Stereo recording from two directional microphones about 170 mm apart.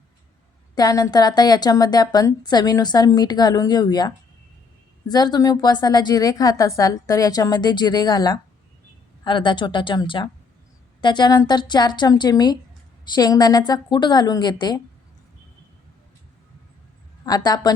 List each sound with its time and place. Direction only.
0.8 s a woman's voice: 20° left (ahead or behind)
17.2 s a woman's voice: 25° left (ahead or behind)